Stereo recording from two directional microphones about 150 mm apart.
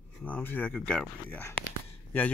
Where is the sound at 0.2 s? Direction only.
10° left (ahead or behind).